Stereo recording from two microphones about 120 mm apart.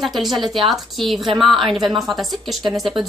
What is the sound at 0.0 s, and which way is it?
A woman's voice, centre (ahead or behind).